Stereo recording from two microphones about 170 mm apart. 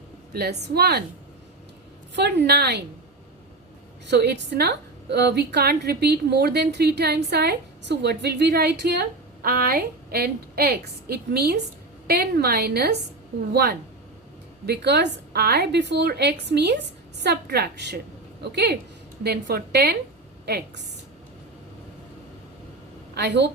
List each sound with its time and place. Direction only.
0.3 s a woman's voice: 70° right (ahead or behind)
2.1 s a woman's voice: 80° right
4.0 s a woman's voice: 80° right
23.1 s a woman's voice: 90° right